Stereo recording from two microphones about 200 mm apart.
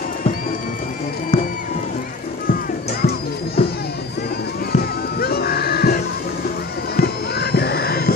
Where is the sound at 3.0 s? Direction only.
50° left (ahead or behind).